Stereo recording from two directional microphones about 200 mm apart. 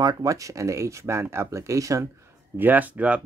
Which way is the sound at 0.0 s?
20° right (ahead or behind).